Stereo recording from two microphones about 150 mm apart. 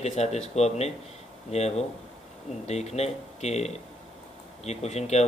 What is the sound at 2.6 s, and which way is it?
Speech, 45° left (ahead or behind).